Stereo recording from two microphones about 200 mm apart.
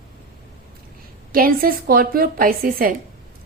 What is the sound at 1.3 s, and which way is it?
A woman's voice, 45° right (ahead or behind).